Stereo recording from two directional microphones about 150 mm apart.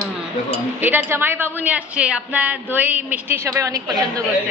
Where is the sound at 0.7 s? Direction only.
15° right (ahead or behind).